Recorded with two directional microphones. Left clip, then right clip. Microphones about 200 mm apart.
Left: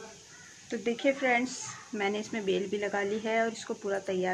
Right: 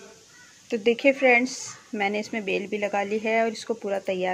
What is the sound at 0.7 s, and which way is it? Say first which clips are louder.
A woman's voice: right 8 dB; 40° right (ahead or behind).